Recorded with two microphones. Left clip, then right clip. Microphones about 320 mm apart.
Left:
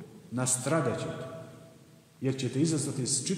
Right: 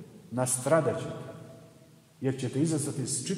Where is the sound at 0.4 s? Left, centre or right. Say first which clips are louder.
Right 4 dB; right.